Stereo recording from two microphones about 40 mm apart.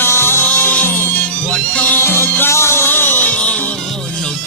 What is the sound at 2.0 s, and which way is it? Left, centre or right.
Music, left.